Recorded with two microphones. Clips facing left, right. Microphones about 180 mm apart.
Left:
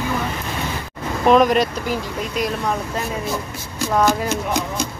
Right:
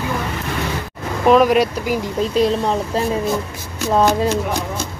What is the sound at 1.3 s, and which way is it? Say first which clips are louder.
Speech: right 2 dB; 5° right (ahead or behind).